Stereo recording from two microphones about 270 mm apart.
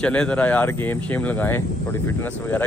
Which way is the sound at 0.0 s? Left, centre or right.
Centre.